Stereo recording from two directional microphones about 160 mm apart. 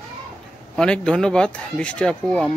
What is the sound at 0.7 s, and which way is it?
Speech, 5° left (ahead or behind).